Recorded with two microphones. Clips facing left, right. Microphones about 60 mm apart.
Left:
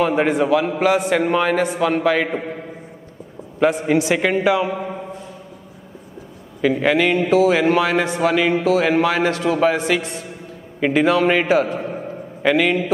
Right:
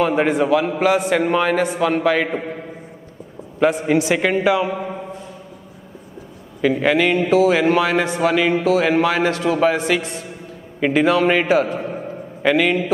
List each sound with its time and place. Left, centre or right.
0.0 s a man's voice: centre
3.6 s a man's voice: centre
6.6 s a man's voice: centre